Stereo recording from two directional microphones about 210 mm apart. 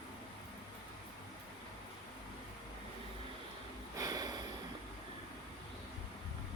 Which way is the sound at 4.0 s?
20° right (ahead or behind).